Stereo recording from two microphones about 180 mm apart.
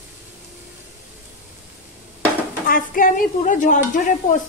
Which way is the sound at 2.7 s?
50° left (ahead or behind).